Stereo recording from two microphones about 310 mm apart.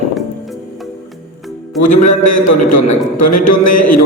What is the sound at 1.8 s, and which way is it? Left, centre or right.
A man's voice, left.